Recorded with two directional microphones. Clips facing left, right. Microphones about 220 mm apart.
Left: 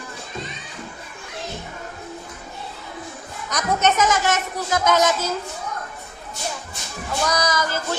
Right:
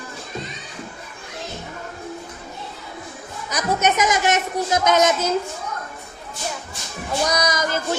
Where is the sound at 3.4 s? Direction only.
10° right (ahead or behind).